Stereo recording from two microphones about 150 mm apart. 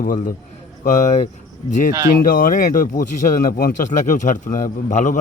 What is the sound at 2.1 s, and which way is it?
Speech, 70° left (ahead or behind).